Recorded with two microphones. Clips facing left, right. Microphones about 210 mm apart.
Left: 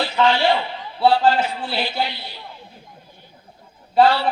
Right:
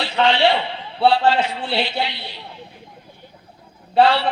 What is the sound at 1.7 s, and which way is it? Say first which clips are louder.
Speech: right 3 dB; 25° right (ahead or behind).